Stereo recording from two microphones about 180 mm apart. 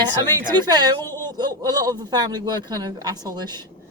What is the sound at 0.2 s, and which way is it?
Speech, 20° right (ahead or behind).